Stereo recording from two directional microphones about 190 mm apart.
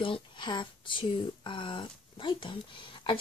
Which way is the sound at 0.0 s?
25° left (ahead or behind).